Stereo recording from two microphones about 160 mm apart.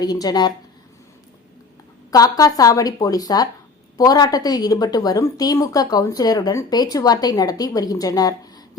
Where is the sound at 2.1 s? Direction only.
20° left (ahead or behind).